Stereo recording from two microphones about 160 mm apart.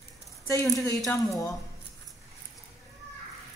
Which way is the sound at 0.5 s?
20° left (ahead or behind).